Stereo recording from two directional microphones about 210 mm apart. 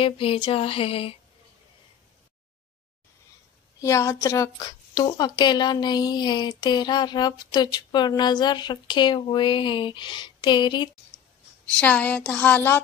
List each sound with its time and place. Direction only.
0.0 s speech: 25° left (ahead or behind)
3.8 s speech: 15° left (ahead or behind)
11.6 s a woman's voice: 5° left (ahead or behind)